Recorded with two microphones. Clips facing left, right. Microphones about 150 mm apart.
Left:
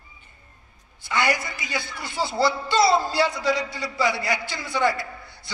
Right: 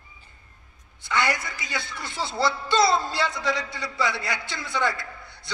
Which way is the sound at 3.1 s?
20° left (ahead or behind).